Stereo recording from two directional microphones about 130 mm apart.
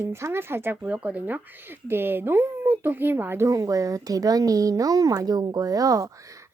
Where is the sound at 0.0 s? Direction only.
20° right (ahead or behind).